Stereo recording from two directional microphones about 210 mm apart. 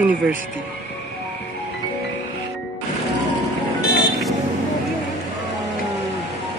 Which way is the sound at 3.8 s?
50° left (ahead or behind).